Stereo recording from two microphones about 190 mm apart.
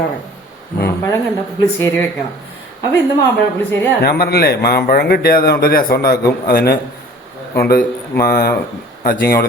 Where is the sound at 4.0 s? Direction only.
55° left (ahead or behind).